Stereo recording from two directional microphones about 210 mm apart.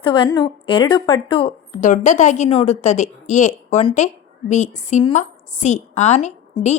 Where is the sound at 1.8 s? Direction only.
35° left (ahead or behind).